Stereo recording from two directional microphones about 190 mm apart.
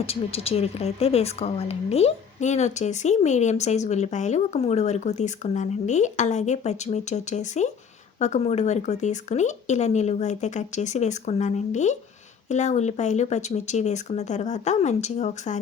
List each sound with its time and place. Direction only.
0.0 s speech: 30° left (ahead or behind)